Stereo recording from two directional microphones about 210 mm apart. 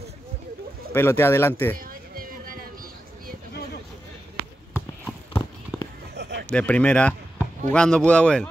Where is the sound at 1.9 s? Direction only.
40° right (ahead or behind).